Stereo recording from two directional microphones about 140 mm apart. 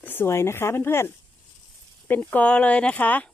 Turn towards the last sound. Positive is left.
turn(degrees=10)  # may be behind; listen again after turning